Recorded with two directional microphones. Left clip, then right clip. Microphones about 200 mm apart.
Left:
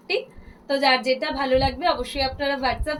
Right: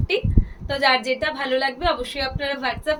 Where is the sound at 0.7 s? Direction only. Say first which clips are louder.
Even; 20° right (ahead or behind).